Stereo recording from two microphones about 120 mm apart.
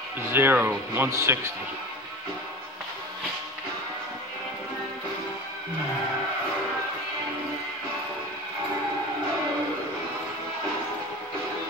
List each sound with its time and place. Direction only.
0.3 s speech: 15° right (ahead or behind)